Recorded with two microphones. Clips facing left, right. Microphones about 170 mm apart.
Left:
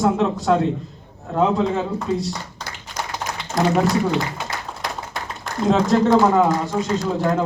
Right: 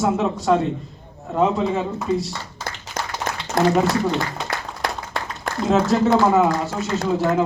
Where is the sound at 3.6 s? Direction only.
55° right (ahead or behind).